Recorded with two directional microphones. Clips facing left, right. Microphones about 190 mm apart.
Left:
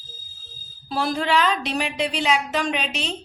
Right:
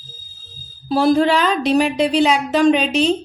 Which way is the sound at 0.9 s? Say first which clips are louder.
Right 9 dB; 35° right (ahead or behind).